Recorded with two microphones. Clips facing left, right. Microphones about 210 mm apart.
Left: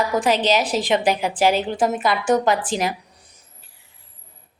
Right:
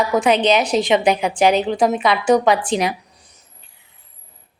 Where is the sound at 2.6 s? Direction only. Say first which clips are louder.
Right 4 dB; 5° left (ahead or behind).